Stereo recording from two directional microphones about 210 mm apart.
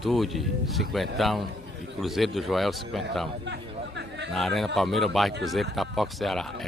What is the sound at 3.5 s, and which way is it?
Chatter, 55° right (ahead or behind).